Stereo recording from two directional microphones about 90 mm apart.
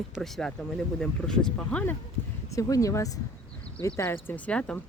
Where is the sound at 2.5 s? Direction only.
40° left (ahead or behind); by 4.8 s 15° left (ahead or behind).